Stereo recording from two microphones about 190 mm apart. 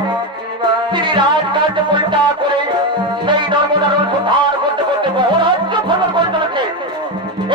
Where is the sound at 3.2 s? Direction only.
25° right (ahead or behind).